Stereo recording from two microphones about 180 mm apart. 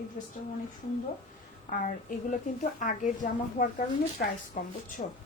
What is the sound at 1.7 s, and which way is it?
A woman's voice, 45° left (ahead or behind).